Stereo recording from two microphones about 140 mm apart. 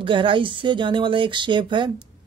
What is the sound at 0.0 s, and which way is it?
A woman's voice, 35° right (ahead or behind).